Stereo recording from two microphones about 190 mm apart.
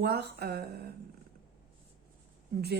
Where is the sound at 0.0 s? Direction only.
60° right (ahead or behind).